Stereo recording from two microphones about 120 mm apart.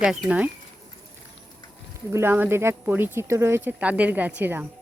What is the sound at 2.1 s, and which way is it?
Speech, 20° right (ahead or behind).